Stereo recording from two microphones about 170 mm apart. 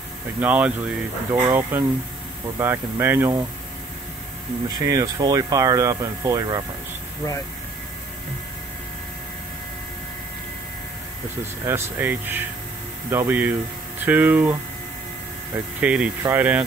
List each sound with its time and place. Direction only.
0.4 s speech: 10° right (ahead or behind)
4.6 s speech: 20° right (ahead or behind)
11.6 s speech: 10° right (ahead or behind)